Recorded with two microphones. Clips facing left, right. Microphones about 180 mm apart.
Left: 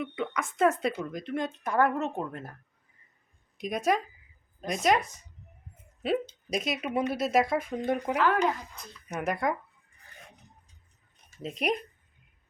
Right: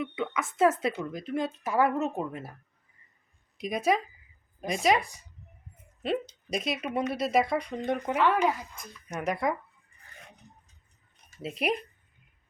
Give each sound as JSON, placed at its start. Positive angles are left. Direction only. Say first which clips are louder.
{"t": 0.0, "sound": "speech", "louder": "right 1 dB", "side_deg": -5}
{"t": 3.6, "sound": "speech", "louder": "right 1 dB", "side_deg": 0}
{"t": 6.5, "sound": "speech", "louder": "left 1 dB", "side_deg": 0}
{"t": 11.4, "sound": "speech", "louder": "even", "side_deg": -5}